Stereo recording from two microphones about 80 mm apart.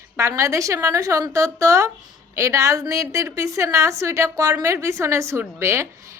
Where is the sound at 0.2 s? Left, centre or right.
Right.